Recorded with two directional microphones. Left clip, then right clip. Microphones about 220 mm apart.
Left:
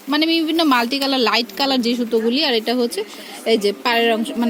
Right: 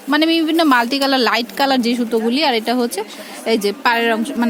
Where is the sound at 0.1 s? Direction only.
Centre (ahead or behind).